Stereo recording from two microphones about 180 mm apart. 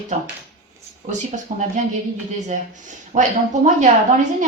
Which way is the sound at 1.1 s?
45° right (ahead or behind).